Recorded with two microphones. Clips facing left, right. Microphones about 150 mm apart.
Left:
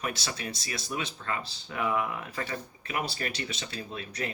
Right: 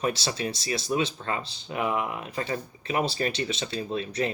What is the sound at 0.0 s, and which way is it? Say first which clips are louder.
Speech: right 7 dB; 30° right (ahead or behind).